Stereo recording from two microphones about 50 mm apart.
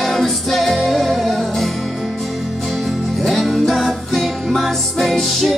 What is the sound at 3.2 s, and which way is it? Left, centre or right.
Music, centre.